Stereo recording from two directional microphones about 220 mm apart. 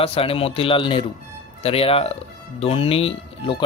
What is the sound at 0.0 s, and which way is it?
Speech, 25° left (ahead or behind).